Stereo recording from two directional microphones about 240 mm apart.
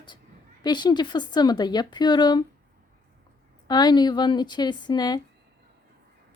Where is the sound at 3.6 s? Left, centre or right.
Centre.